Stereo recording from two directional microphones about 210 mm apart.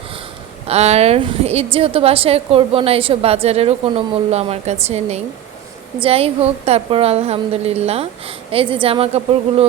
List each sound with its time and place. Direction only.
0.7 s a woman's voice: 30° right (ahead or behind)